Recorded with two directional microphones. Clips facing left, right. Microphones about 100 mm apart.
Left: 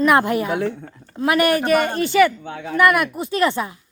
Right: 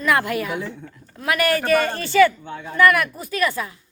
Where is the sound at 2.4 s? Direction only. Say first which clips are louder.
Left 4 dB; 65° left (ahead or behind).